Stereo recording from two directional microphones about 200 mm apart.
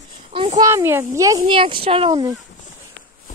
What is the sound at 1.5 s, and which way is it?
Speech, 25° right (ahead or behind).